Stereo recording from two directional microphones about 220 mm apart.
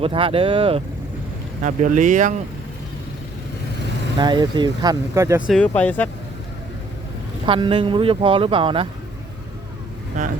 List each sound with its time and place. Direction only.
0.0 s speech: 25° right (ahead or behind)
1.6 s speech: 35° right (ahead or behind)
4.2 s speech: 20° right (ahead or behind)
5.5 s speech: 5° left (ahead or behind)
7.4 s speech: 25° right (ahead or behind)